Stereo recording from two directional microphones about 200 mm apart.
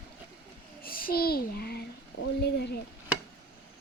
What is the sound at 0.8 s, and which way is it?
A child's voice, 45° left (ahead or behind).